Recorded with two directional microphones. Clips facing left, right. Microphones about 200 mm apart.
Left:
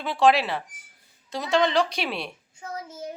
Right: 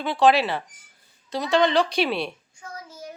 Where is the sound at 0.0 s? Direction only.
Centre (ahead or behind).